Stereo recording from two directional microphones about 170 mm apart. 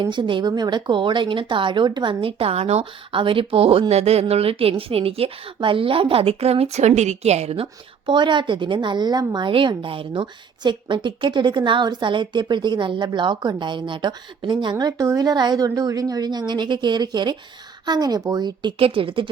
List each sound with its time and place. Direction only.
0.0 s speech: 30° right (ahead or behind)